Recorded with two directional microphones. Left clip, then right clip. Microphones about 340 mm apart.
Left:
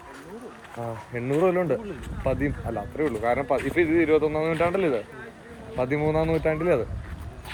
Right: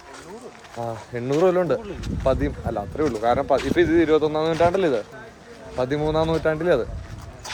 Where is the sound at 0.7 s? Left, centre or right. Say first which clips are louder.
Right 3 dB; centre.